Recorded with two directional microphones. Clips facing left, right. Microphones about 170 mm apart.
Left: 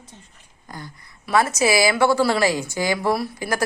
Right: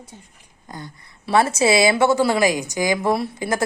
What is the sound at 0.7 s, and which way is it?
A woman's voice, 25° right (ahead or behind).